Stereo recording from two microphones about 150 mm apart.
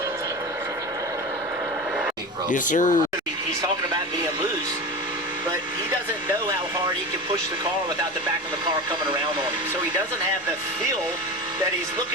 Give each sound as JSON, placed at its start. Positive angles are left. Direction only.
{"t": 2.5, "sound": "speech", "side_deg": 60}